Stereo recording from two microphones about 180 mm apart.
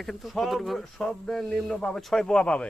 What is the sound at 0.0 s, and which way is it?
Speech, centre (ahead or behind).